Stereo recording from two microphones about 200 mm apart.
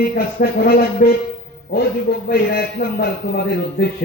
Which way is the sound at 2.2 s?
45° left (ahead or behind).